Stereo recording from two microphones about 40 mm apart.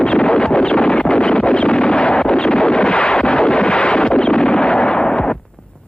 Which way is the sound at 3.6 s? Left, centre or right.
Left.